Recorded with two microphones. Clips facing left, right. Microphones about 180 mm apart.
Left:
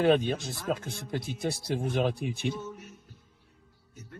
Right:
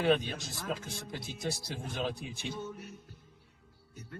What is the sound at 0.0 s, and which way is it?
Speech, 50° left (ahead or behind).